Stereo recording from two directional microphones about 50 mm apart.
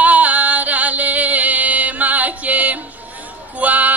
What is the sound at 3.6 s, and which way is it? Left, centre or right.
Music, right.